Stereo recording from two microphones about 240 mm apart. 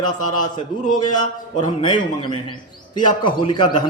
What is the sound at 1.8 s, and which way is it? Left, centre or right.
A man's voice, centre.